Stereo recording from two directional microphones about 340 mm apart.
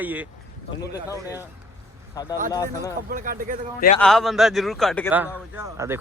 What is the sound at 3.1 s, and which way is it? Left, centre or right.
Speech, right.